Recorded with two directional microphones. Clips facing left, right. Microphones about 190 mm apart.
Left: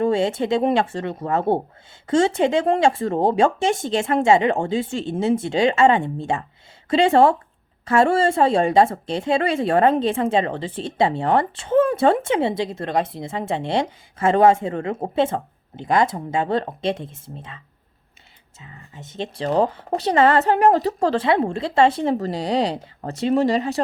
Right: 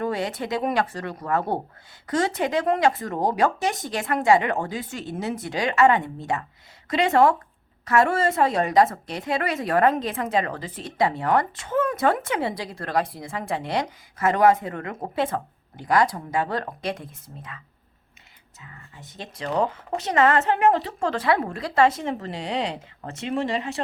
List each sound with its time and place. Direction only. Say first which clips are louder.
0.0 s speech: left 7 dB; 25° left (ahead or behind)
18.6 s a woman's voice: left 4 dB; 25° left (ahead or behind); by 23.8 s 40° left (ahead or behind)